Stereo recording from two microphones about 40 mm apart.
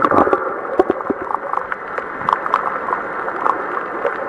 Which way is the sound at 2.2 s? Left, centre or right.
Centre.